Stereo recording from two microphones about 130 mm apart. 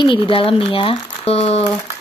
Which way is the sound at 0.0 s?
40° left (ahead or behind).